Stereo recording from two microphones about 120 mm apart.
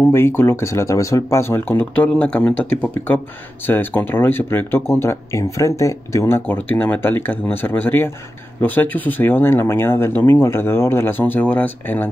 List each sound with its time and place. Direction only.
0.0 s speech: 20° left (ahead or behind)